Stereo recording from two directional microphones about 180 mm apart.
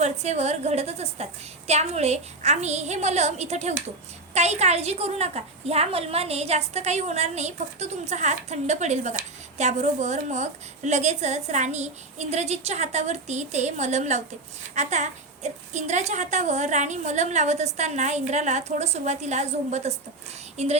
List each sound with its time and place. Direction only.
0.0 s a woman's voice: 40° right (ahead or behind)